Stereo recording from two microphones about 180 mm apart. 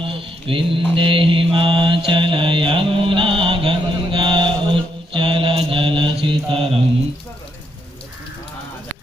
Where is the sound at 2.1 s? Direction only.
30° right (ahead or behind).